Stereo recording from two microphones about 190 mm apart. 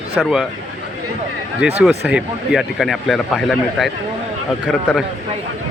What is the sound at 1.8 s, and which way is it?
Speech, 5° right (ahead or behind).